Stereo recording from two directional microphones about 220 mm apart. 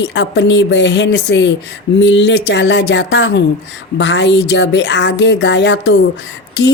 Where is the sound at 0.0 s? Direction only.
55° left (ahead or behind).